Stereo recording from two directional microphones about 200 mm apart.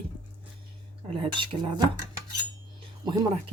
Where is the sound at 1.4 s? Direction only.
25° right (ahead or behind).